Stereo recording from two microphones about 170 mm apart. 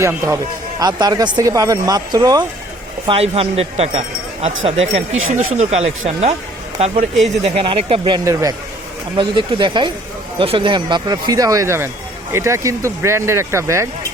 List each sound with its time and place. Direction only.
0.0 s speech: 15° right (ahead or behind)
3.1 s a man's voice: 35° right (ahead or behind)
8.2 s speech: 20° right (ahead or behind)